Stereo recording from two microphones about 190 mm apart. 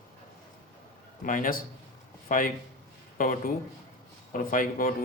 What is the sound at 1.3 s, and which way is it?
A man's voice, 45° left (ahead or behind).